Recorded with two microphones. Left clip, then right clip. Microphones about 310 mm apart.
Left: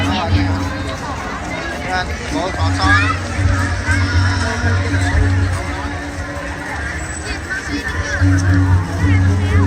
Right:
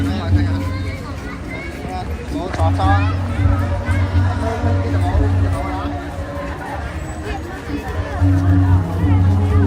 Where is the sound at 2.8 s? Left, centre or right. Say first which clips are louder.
Left 6 dB; right.